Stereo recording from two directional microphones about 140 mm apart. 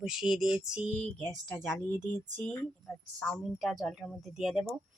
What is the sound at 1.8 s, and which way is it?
Speech, 15° left (ahead or behind).